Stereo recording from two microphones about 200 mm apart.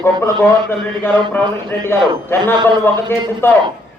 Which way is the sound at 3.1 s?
10° left (ahead or behind).